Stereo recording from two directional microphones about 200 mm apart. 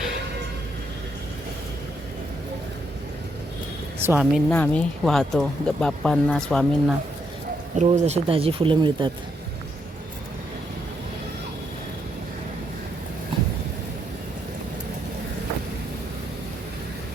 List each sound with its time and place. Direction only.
4.0 s speech: 10° right (ahead or behind)
4.4 s speech: 5° left (ahead or behind)
7.8 s speech: 35° right (ahead or behind)